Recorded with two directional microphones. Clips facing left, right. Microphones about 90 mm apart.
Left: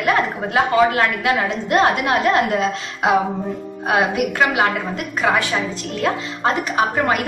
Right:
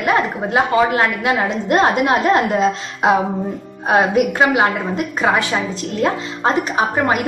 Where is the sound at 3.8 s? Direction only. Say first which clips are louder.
Right 4 dB; 25° right (ahead or behind).